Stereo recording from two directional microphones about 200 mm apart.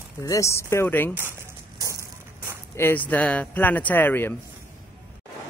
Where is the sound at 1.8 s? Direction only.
15° right (ahead or behind).